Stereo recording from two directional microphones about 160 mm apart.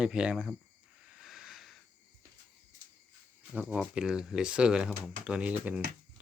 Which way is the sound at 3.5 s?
10° right (ahead or behind).